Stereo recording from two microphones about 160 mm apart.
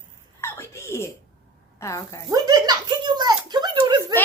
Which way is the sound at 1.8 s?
20° left (ahead or behind).